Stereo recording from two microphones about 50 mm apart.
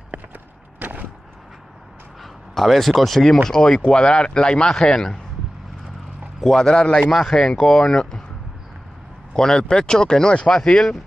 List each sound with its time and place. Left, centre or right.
0.7 s a sound: right
2.5 s speech: centre
6.4 s speech: centre
9.3 s speech: centre